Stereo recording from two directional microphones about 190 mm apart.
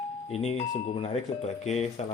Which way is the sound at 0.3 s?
35° left (ahead or behind).